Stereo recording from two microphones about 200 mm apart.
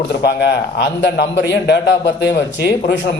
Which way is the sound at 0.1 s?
55° left (ahead or behind).